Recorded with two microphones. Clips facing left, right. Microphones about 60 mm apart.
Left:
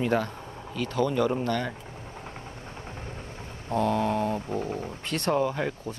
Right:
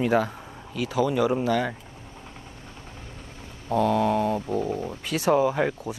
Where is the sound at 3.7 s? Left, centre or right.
Centre.